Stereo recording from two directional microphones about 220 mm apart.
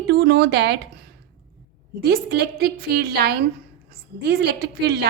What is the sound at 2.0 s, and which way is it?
A woman's voice, 45° right (ahead or behind).